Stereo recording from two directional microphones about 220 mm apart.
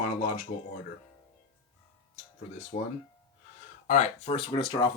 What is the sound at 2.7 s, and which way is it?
Speech, 30° left (ahead or behind).